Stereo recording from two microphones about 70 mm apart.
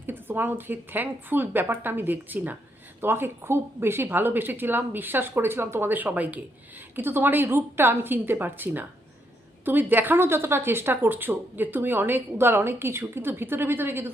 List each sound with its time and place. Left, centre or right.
0.0 s a woman's voice: right